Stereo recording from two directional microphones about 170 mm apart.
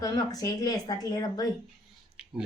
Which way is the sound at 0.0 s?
20° left (ahead or behind).